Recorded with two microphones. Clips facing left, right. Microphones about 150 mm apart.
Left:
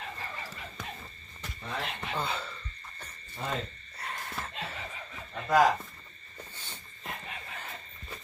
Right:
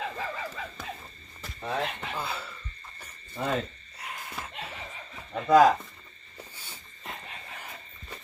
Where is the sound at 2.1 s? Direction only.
10° right (ahead or behind).